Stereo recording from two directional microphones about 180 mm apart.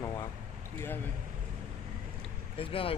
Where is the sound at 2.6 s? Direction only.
30° left (ahead or behind).